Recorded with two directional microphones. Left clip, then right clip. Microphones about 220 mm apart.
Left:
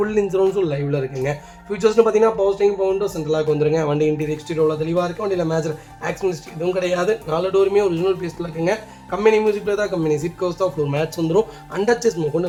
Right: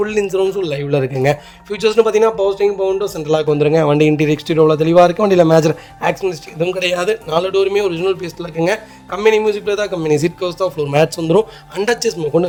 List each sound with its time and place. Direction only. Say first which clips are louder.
0.0 s speech: right 2 dB; 35° right (ahead or behind)